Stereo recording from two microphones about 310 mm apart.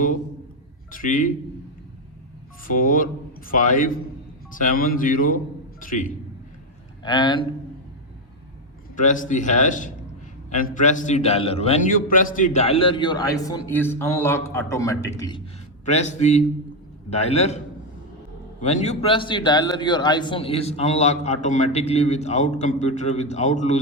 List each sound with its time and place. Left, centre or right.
0.9 s a man's voice: left
2.6 s a man's voice: left
7.0 s a man's voice: centre
9.0 s a man's voice: left; by 14.9 s centre
15.9 s a man's voice: left
18.6 s a man's voice: left